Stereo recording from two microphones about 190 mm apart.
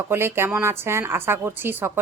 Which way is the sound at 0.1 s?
10° right (ahead or behind).